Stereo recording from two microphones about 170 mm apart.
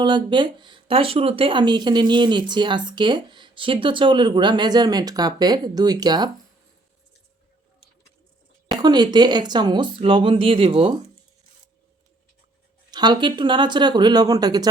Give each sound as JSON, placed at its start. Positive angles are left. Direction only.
{"t": 0.0, "sound": "speech", "side_deg": -25}
{"t": 8.7, "sound": "speech", "side_deg": -25}
{"t": 12.9, "sound": "speech", "side_deg": -25}